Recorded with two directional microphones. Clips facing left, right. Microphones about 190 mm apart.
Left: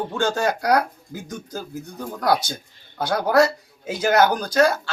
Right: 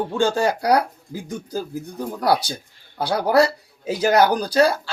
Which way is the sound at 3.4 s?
35° right (ahead or behind).